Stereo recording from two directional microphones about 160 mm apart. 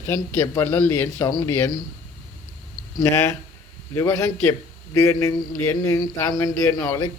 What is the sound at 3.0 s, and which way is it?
A man's voice, 20° left (ahead or behind).